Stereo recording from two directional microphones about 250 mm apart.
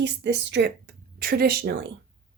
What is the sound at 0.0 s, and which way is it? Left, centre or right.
Speech, right.